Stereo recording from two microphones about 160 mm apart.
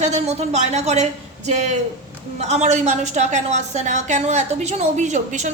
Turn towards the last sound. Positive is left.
turn(degrees=-50)  # may be behind; listen again after turning